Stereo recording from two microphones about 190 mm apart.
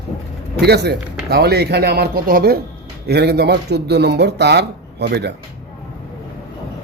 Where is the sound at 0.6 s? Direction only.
60° right (ahead or behind).